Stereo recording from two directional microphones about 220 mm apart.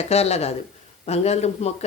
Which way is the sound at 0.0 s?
30° left (ahead or behind).